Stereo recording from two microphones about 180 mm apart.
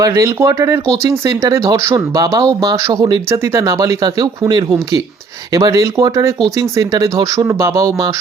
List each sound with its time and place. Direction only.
0.0 s speech: 15° right (ahead or behind)